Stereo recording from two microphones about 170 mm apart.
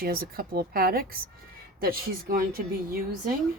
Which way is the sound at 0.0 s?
60° right (ahead or behind).